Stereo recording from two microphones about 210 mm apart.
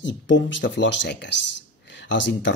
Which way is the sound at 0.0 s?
60° left (ahead or behind).